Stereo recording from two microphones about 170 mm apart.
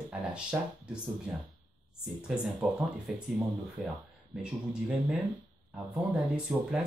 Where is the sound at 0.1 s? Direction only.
5° right (ahead or behind).